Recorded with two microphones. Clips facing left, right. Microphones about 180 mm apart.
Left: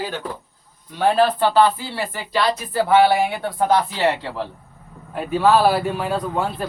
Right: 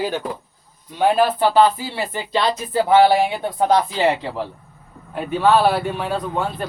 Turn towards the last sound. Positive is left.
turn(degrees=5)  # may be behind; listen again after turning